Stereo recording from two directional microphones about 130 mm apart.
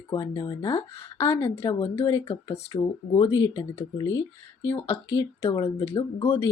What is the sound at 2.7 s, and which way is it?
Speech, 30° left (ahead or behind).